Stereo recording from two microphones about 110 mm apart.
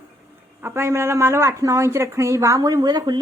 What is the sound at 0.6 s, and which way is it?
A woman's voice, 20° right (ahead or behind).